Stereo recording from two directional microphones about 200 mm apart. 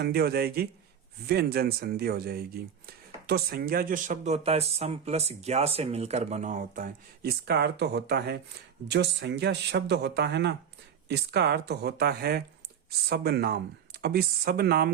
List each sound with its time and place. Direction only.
0.0 s speech: 50° right (ahead or behind)